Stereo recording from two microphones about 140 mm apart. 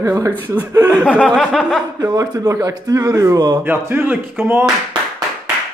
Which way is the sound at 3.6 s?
15° right (ahead or behind).